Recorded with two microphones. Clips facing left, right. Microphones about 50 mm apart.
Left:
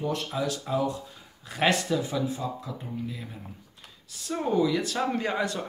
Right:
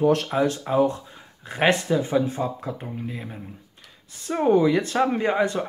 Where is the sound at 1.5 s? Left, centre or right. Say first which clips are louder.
Right 4 dB; right.